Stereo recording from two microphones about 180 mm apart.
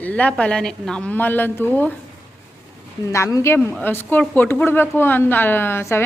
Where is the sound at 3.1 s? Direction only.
20° left (ahead or behind).